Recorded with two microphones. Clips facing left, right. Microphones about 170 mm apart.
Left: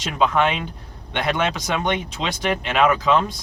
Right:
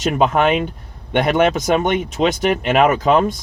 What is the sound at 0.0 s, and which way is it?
Speech, 45° right (ahead or behind).